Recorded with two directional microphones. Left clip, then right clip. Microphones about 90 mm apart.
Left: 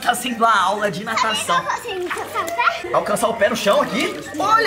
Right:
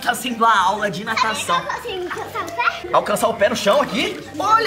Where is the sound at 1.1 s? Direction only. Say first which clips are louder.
Even; 30° left (ahead or behind).